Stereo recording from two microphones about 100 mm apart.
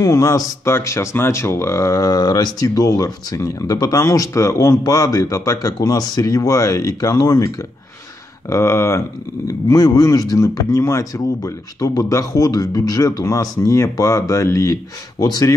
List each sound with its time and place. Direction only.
0.0 s speech: 35° left (ahead or behind)